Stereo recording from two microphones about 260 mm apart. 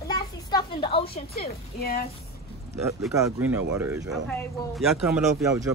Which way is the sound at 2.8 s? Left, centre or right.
Centre.